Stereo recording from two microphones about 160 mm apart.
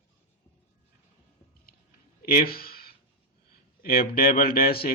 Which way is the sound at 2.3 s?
70° left (ahead or behind).